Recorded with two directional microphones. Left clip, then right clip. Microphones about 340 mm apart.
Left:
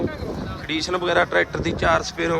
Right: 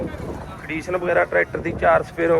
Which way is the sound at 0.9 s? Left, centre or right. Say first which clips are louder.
Right 1 dB; centre.